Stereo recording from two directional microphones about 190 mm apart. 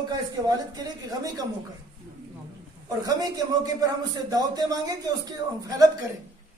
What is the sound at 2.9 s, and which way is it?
A man's voice, 20° right (ahead or behind).